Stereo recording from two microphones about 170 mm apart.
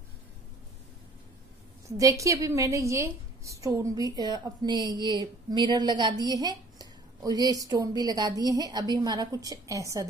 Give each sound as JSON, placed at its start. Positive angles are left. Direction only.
{"t": 1.9, "sound": "a woman's voice", "side_deg": -20}